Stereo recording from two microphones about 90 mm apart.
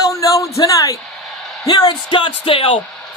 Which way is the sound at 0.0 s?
40° left (ahead or behind).